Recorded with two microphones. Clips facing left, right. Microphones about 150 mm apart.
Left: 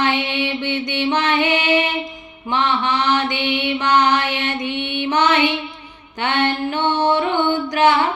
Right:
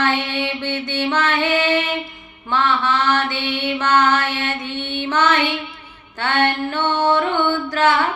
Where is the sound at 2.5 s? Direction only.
15° left (ahead or behind).